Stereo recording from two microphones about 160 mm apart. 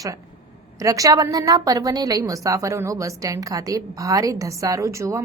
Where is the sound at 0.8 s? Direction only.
20° right (ahead or behind).